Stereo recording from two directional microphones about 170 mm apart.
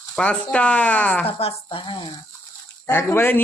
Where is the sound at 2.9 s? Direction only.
15° left (ahead or behind).